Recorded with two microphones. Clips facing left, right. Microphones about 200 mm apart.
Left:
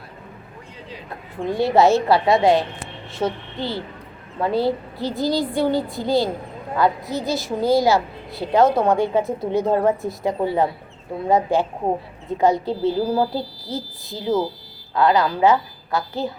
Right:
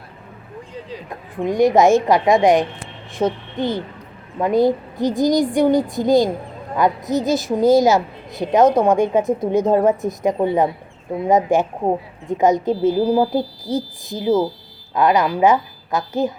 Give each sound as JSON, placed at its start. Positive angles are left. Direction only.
{"t": 1.5, "sound": "a woman's voice", "side_deg": -15}